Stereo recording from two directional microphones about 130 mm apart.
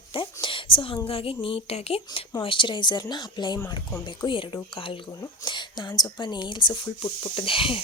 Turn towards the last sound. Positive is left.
turn(degrees=45)  # may be behind; listen again after turning